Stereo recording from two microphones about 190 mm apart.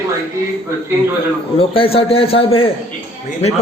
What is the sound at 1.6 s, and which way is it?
A man's voice, 30° left (ahead or behind).